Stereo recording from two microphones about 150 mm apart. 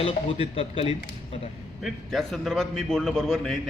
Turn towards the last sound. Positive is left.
turn(degrees=5)  # may be behind; listen again after turning